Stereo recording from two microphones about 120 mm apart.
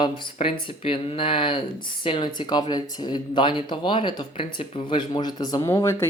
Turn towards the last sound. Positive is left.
turn(degrees=25)  # may be behind; listen again after turning